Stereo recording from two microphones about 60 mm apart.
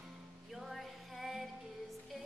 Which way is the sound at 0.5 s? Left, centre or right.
Centre.